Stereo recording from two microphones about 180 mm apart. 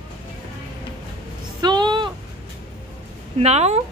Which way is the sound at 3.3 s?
35° right (ahead or behind).